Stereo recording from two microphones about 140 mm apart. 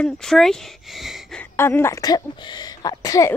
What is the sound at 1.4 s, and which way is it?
Speech, 15° left (ahead or behind).